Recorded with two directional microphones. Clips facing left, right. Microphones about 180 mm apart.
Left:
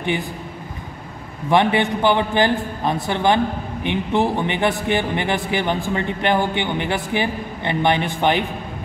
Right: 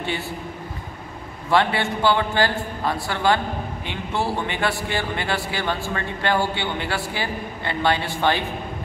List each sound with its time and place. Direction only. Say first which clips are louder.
1.5 s a man's voice: left 4 dB; 20° left (ahead or behind)